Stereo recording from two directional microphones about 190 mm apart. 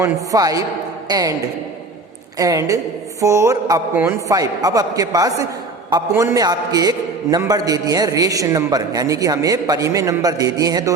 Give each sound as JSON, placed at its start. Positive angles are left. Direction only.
{"t": 0.0, "sound": "mantra", "side_deg": -20}
{"t": 1.0, "sound": "a man's voice", "side_deg": -20}
{"t": 2.4, "sound": "mantra", "side_deg": -15}
{"t": 5.9, "sound": "a man's voice", "side_deg": -20}